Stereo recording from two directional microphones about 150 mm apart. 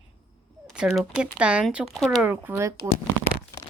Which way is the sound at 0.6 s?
5° right (ahead or behind).